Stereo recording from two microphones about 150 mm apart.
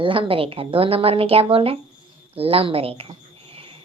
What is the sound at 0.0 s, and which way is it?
A woman's voice, 35° right (ahead or behind).